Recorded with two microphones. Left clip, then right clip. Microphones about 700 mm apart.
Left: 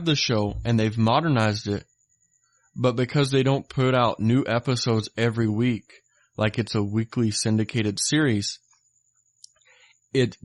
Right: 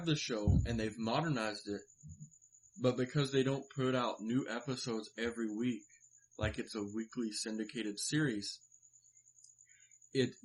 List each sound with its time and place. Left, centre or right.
0.0 s speech: left
2.8 s speech: left
10.1 s speech: left